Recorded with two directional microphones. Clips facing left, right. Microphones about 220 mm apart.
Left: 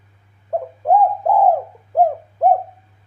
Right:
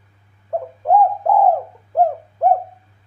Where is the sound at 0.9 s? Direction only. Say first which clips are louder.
Even; 15° left (ahead or behind).